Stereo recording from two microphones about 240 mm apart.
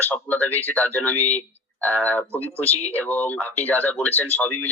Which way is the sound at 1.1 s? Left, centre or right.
Left.